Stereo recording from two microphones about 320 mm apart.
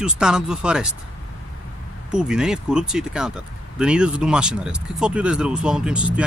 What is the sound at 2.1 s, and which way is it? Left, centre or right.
Speech, centre.